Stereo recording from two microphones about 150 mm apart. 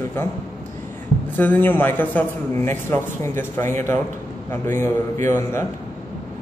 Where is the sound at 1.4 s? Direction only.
15° left (ahead or behind).